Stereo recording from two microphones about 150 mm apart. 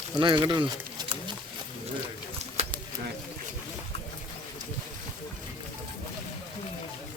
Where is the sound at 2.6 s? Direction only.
45° right (ahead or behind).